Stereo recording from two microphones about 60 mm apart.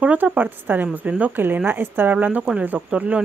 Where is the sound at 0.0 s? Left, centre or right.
Right.